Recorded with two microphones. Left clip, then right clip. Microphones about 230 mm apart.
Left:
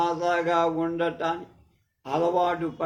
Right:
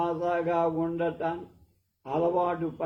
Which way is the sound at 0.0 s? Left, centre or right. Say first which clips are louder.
Left 3 dB; left.